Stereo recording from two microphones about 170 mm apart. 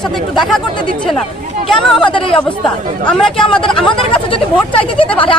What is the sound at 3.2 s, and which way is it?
Speech, 5° left (ahead or behind).